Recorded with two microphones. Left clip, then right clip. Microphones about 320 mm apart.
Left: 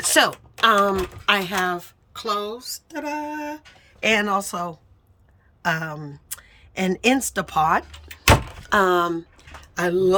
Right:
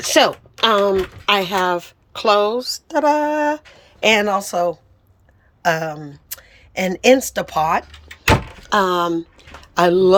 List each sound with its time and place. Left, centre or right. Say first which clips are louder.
0.0 s a woman's voice: right 4 dB; centre
2.9 s a sound: right 13 dB; right
3.8 s a woman's voice: right 5 dB; centre